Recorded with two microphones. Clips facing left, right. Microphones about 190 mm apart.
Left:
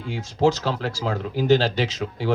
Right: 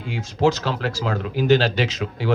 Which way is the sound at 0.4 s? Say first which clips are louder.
Right 1 dB; 75° right (ahead or behind).